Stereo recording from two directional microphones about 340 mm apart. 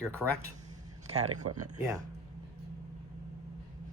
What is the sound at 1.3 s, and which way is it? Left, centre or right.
Speech, right.